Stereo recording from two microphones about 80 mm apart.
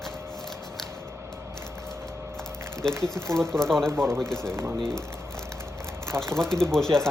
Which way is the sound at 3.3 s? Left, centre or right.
Centre.